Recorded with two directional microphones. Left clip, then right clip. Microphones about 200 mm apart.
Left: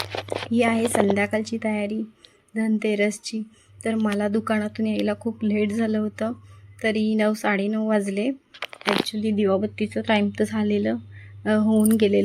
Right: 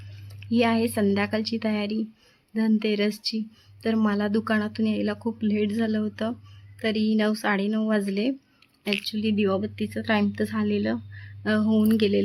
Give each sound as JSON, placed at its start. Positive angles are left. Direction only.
{"t": 0.5, "sound": "a woman's voice", "side_deg": -5}
{"t": 2.7, "sound": "a woman's voice", "side_deg": -10}